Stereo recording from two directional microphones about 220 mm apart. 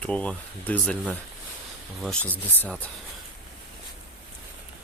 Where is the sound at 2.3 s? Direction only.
10° left (ahead or behind).